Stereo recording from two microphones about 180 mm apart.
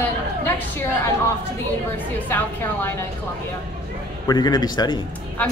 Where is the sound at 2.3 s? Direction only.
10° left (ahead or behind).